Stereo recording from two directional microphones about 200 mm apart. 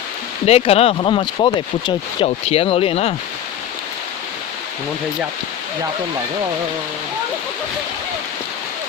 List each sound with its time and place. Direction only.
0.4 s speech: 30° left (ahead or behind)